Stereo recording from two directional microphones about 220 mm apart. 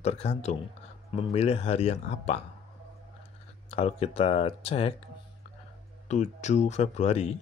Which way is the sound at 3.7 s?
25° left (ahead or behind).